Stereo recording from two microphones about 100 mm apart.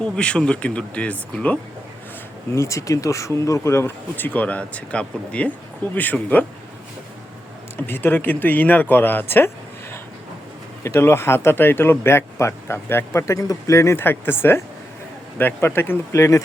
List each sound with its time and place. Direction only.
0.0 s speech: 10° left (ahead or behind)
2.6 s speech: 30° left (ahead or behind); by 6.4 s 15° left (ahead or behind)
7.8 s speech: 20° left (ahead or behind)
10.8 s speech: 25° left (ahead or behind)